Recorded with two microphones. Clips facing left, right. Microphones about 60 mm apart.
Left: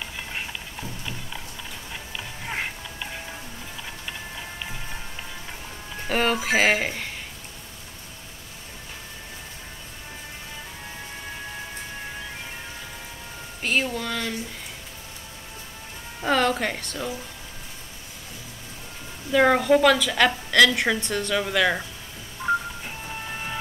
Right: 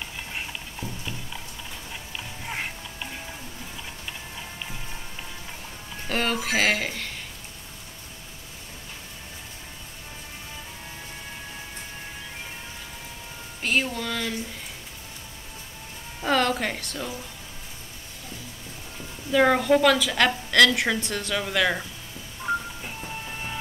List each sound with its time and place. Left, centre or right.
2.4 s music: centre
6.0 s speech: centre
13.6 s speech: centre
16.2 s a woman's voice: centre
19.3 s a woman's voice: centre
22.4 s telephone dialing: centre